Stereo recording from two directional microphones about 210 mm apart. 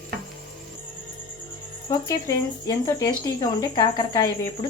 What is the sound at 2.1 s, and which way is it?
Speech, 15° left (ahead or behind).